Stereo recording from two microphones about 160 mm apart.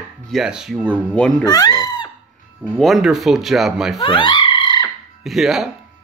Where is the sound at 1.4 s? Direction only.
25° left (ahead or behind).